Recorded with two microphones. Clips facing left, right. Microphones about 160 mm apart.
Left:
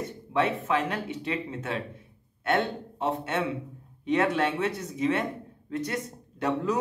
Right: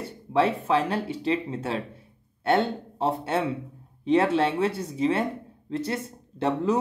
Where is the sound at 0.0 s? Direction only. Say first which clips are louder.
Right 3 dB; 30° right (ahead or behind).